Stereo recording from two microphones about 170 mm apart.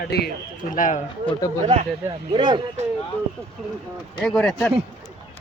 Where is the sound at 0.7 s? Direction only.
50° left (ahead or behind).